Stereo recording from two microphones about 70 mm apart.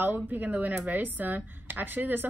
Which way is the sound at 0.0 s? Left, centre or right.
Right.